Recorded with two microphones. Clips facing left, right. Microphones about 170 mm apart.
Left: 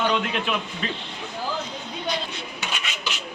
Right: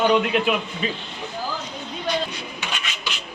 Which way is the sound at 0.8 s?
5° right (ahead or behind).